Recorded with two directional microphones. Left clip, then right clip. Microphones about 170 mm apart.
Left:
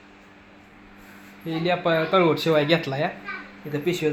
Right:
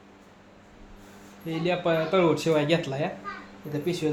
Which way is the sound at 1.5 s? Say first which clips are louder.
Left 3 dB; 30° left (ahead or behind).